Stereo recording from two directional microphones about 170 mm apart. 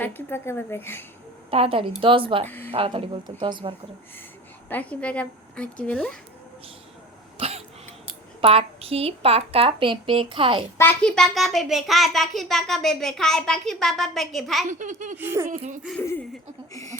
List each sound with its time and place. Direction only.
0.0 s a woman's voice: 10° left (ahead or behind)
1.5 s a woman's voice: 35° right (ahead or behind)
2.5 s a woman's voice: 10° left (ahead or behind)
2.7 s a woman's voice: 35° right (ahead or behind)
4.7 s a woman's voice: 10° left (ahead or behind)
7.3 s cough: 35° right (ahead or behind)
8.4 s a woman's voice: 35° right (ahead or behind)
10.8 s a child's voice: 10° left (ahead or behind)
14.6 s a child's voice: 45° right (ahead or behind)
15.2 s speech: 15° right (ahead or behind)
15.4 s a child's voice: 50° right (ahead or behind)
16.0 s a woman's voice: 10° left (ahead or behind)